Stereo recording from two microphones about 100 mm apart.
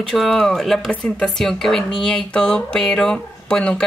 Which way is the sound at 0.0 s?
Centre (ahead or behind).